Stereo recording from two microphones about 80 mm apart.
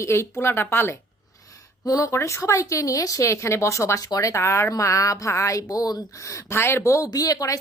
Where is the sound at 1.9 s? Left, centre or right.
Left.